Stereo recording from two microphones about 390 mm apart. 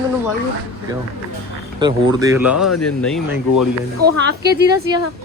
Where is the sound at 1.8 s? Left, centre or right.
Centre.